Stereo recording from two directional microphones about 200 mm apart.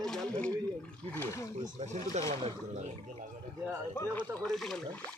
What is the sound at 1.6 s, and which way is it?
Speech, 35° right (ahead or behind).